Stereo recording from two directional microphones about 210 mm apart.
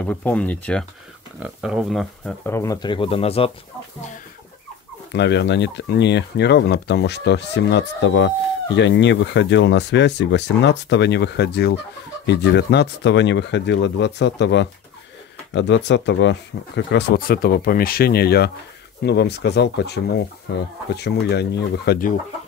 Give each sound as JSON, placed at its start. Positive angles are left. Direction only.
{"t": 0.0, "sound": "speech", "side_deg": 5}
{"t": 1.4, "sound": "speech", "side_deg": -5}
{"t": 5.1, "sound": "speech", "side_deg": 55}